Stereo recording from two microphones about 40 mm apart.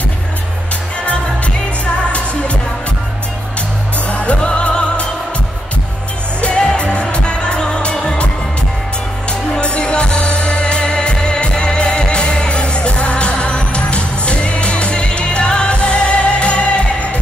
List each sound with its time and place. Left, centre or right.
4.1 s music: left
6.4 s music: left
9.3 s music: left